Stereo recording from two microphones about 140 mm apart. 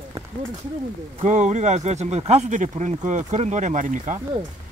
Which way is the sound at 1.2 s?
60° right (ahead or behind).